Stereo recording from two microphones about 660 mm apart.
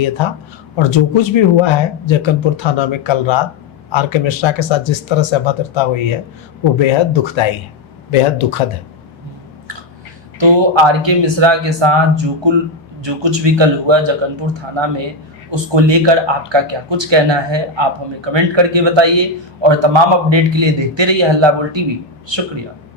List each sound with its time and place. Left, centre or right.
0.8 s speech: left
10.4 s speech: right